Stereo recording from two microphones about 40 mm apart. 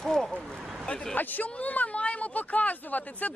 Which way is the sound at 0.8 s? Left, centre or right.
Left.